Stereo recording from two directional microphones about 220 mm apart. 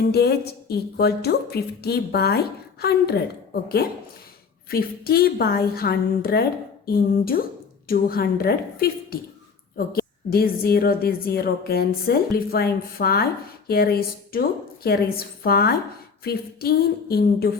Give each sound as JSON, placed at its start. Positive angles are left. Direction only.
{"t": 0.1, "sound": "a woman's voice", "side_deg": 45}